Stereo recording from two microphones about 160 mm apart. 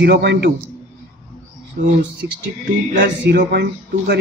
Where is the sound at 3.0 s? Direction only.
80° right.